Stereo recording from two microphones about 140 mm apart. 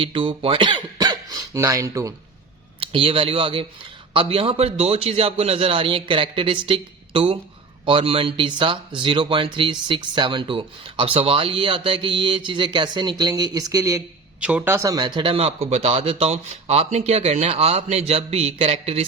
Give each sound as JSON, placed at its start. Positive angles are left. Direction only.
{"t": 0.0, "sound": "speech", "side_deg": -40}
{"t": 2.8, "sound": "speech", "side_deg": -40}
{"t": 14.4, "sound": "a man's voice", "side_deg": -10}